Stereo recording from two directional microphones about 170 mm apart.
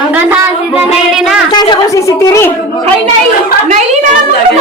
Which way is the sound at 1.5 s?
25° left (ahead or behind).